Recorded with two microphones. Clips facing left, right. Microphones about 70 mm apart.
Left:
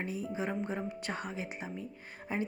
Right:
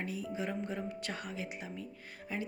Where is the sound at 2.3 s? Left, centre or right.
Left.